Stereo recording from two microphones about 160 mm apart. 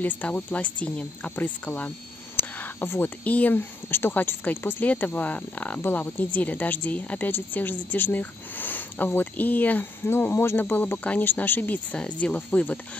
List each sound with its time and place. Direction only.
0.0 s speech: 10° left (ahead or behind)